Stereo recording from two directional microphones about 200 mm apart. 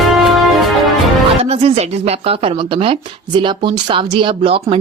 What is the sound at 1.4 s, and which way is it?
A woman's voice, 30° right (ahead or behind).